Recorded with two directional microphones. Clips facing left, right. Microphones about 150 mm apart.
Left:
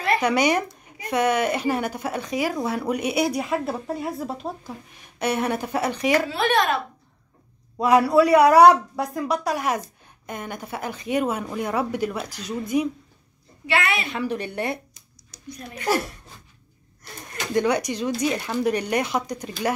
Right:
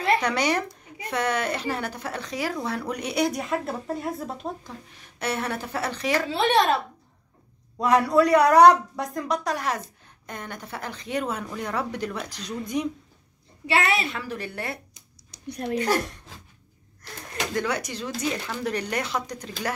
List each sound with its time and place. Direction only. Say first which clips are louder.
0.2 s speech: left 4 dB; 10° left (ahead or behind)
4.9 s speech: left 4 dB; 15° left (ahead or behind)
6.3 s speech: right 1 dB; 30° right (ahead or behind)
7.8 s speech: left 3 dB; 5° left (ahead or behind)
13.7 s speech: even; 35° right (ahead or behind)
14.0 s a woman's voice: left 5 dB; 20° left (ahead or behind)
15.4 s speech: right 10 dB; 75° right (ahead or behind)
17.6 s speech: left 8 dB; 15° left (ahead or behind)